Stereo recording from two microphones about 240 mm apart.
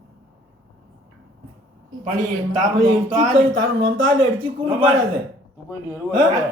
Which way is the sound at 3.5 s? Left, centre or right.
Right.